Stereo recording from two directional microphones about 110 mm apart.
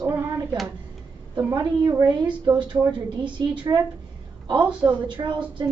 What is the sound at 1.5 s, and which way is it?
A woman's voice, 40° right (ahead or behind).